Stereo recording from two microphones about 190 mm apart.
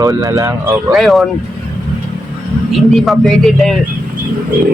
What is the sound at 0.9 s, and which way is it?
Speech, centre (ahead or behind).